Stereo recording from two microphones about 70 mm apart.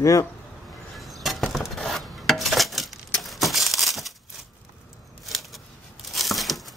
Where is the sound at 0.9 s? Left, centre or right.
Centre.